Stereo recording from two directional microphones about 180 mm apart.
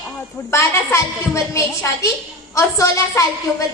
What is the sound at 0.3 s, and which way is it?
A woman's voice, 15° left (ahead or behind).